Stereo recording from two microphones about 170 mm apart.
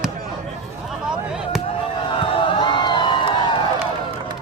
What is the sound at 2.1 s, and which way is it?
Crowd, 30° left (ahead or behind).